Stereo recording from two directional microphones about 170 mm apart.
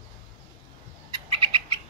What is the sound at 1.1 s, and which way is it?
Cat, 30° right (ahead or behind).